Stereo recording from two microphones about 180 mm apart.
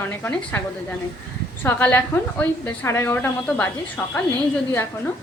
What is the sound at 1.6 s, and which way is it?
A woman's voice, 10° left (ahead or behind).